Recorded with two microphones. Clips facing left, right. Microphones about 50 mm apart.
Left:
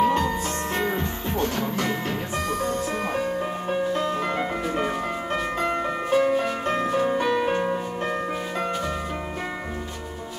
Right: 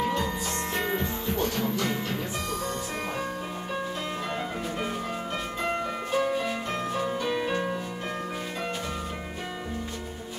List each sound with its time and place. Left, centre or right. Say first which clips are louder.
0.0 s music: left 7 dB; left
0.7 s music: left 1 dB; centre
1.8 s music: left 3 dB; left
3.9 s music: left 7 dB; left
7.3 s music: left 5 dB; centre